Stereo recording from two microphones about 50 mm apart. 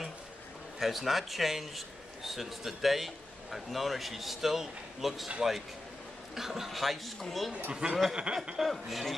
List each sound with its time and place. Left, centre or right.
0.7 s a man's voice: centre
6.3 s a man's voice: centre
7.7 s speech: centre
8.1 s a sound: centre
8.5 s a man's voice: centre